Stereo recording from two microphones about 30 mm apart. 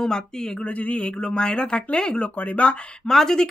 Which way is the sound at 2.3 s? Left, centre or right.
Left.